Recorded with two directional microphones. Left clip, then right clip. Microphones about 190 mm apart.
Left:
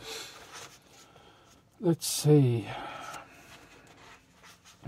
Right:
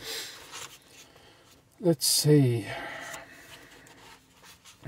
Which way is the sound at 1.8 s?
20° right (ahead or behind).